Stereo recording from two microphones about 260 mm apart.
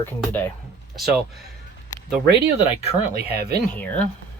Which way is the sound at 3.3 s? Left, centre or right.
Right.